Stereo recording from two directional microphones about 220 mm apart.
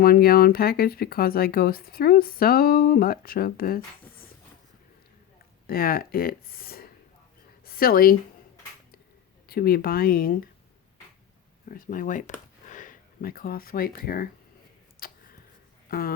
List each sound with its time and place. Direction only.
0.0 s speech: 45° left (ahead or behind)
5.6 s speech: 40° left (ahead or behind)
7.6 s a sound: 40° left (ahead or behind)
9.5 s speech: 40° left (ahead or behind)
11.7 s speech: 40° left (ahead or behind)
15.0 s a sound: 40° left (ahead or behind)
15.9 s speech: 40° left (ahead or behind)